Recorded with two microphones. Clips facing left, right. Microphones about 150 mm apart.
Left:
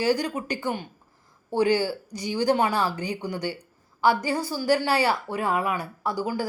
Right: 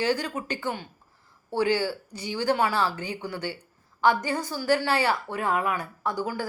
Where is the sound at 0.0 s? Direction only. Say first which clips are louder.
Left 3 dB; 15° left (ahead or behind).